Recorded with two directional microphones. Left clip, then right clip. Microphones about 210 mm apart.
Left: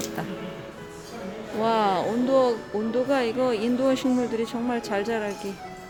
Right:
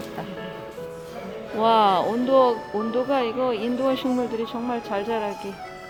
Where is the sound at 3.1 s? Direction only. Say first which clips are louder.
Even; 15° left (ahead or behind).